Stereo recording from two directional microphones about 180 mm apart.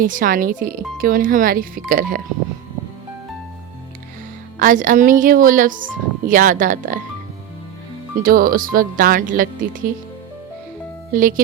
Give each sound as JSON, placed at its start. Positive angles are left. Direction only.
{"t": 0.0, "sound": "speech", "side_deg": -50}
{"t": 4.6, "sound": "speech", "side_deg": -45}
{"t": 8.2, "sound": "speech", "side_deg": -55}
{"t": 11.1, "sound": "speech", "side_deg": -50}